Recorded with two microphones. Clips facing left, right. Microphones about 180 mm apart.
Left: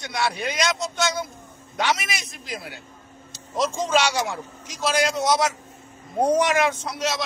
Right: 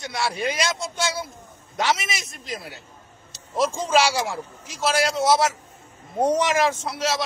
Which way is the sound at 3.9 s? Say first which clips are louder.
Right 2 dB; 5° right (ahead or behind).